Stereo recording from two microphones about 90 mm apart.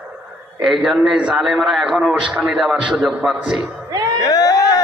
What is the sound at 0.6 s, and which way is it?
A man's voice, centre (ahead or behind).